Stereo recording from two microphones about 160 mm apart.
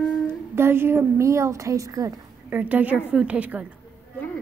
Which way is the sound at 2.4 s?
10° right (ahead or behind).